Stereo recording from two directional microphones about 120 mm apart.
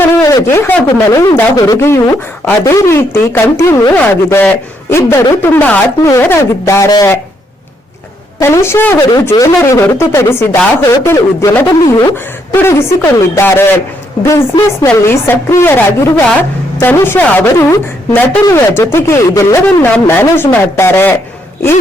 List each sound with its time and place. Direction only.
0.2 s a woman's voice: 25° left (ahead or behind)
8.4 s speech: 25° left (ahead or behind)
12.5 s speech: 20° left (ahead or behind)
14.8 s a woman's voice: 20° left (ahead or behind)